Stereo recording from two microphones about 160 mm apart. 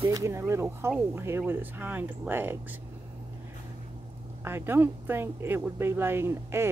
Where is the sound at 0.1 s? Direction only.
20° right (ahead or behind).